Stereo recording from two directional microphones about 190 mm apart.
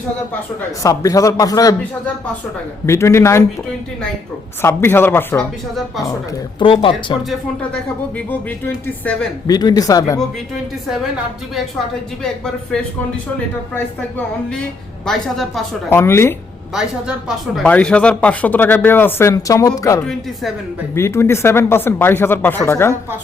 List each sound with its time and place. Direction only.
0.8 s speech: 15° left (ahead or behind)
2.8 s speech: 15° left (ahead or behind)
4.6 s speech: 10° left (ahead or behind)
6.6 s speech: 25° left (ahead or behind)
8.3 s speech: 10° left (ahead or behind)
9.5 s speech: 20° left (ahead or behind)
15.0 s a woman's voice: centre (ahead or behind)
15.9 s speech: 15° left (ahead or behind)
16.7 s speech: centre (ahead or behind); by 23.0 s 15° left (ahead or behind)